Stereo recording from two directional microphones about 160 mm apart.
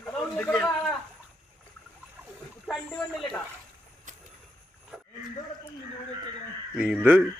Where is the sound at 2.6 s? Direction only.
Centre (ahead or behind).